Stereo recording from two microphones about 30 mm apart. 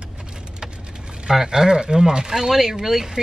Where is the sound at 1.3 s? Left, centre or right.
Centre.